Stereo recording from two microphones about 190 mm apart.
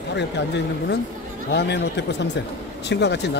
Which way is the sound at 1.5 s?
65° left (ahead or behind).